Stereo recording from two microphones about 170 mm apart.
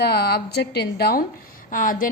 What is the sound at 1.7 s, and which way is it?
Speech, 50° left (ahead or behind).